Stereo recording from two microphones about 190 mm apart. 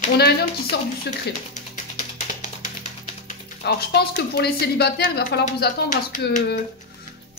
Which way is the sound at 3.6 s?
60° left (ahead or behind).